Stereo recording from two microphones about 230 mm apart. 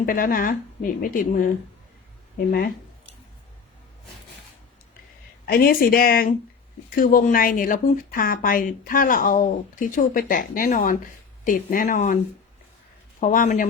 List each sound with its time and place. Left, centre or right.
0.0 s speech: left
5.5 s speech: left